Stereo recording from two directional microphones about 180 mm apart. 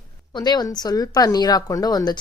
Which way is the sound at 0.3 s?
20° left (ahead or behind).